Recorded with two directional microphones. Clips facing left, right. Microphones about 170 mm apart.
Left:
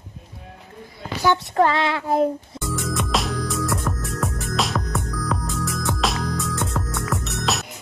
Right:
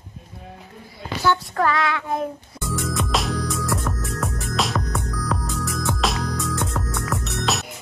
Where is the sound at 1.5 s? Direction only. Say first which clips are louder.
Left 3 dB; 25° left (ahead or behind).